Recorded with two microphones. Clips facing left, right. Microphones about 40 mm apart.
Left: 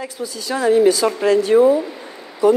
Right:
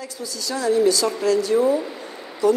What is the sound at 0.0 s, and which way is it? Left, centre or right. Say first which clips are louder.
A woman's voice: left 4 dB; left.